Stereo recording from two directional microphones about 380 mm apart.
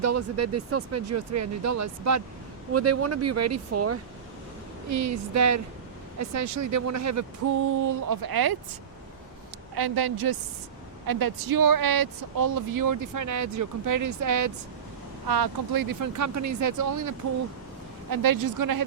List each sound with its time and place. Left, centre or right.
0.0 s speech: right
7.9 s speech: right
9.7 s a woman's voice: right
15.3 s speech: right